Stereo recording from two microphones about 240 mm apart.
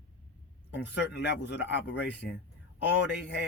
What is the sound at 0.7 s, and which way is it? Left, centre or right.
Speech, left.